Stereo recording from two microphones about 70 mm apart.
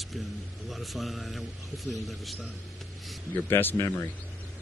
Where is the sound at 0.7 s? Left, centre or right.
Centre.